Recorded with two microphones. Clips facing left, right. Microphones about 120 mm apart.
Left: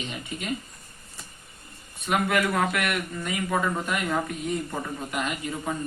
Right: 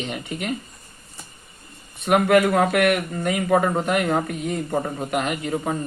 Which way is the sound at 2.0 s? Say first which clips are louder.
Right 8 dB; 60° right (ahead or behind).